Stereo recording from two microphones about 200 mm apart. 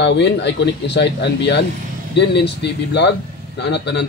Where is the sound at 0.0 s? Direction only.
60° left (ahead or behind).